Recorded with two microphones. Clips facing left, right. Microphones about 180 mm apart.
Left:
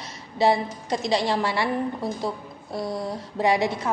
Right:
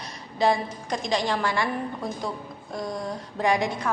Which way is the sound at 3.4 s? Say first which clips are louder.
Left 2 dB; 25° left (ahead or behind).